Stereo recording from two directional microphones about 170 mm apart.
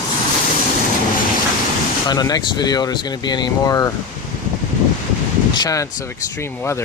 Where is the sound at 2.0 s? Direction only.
25° left (ahead or behind).